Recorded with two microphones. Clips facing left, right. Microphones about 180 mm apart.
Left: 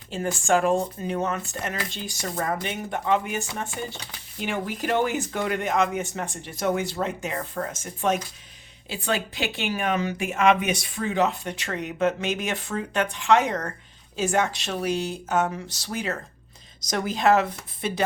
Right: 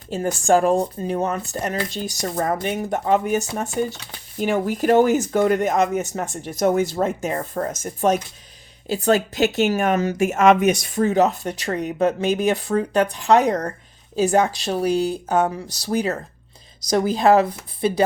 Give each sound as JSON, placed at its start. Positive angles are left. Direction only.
{"t": 0.1, "sound": "speech", "side_deg": -40}